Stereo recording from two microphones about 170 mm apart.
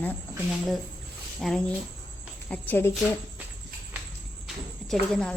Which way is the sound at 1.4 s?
5° left (ahead or behind).